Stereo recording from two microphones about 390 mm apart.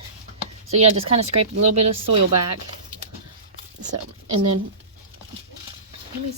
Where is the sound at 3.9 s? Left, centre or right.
Right.